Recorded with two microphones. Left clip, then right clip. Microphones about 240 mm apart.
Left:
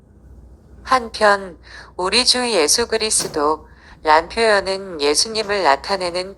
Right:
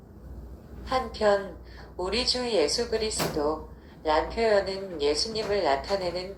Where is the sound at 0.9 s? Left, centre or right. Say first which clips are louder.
Left 9 dB; left.